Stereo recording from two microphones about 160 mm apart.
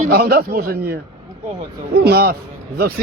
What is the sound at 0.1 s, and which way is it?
A man's voice, 75° right (ahead or behind).